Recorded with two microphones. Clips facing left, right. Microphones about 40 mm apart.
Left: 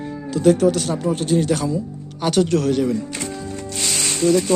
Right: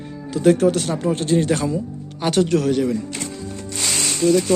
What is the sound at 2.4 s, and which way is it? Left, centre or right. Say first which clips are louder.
Speech: even; centre.